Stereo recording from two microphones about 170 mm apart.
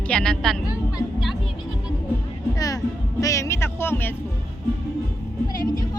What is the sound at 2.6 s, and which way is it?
Music, 20° left (ahead or behind).